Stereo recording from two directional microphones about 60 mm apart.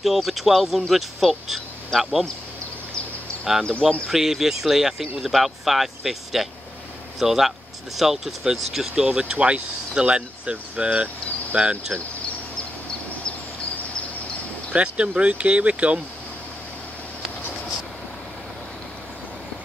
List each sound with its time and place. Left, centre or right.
0.0 s speech: centre
4.1 s speech: centre
14.7 s speech: centre